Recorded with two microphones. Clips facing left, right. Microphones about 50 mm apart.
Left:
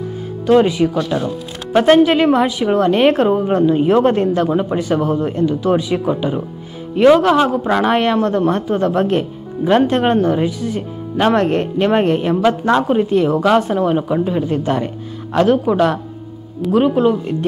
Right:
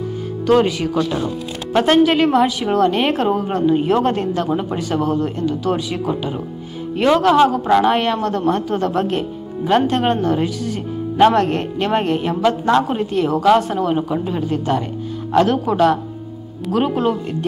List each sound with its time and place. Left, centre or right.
0.5 s a woman's voice: centre
10.2 s a woman's voice: centre
14.4 s speech: left
15.3 s speech: centre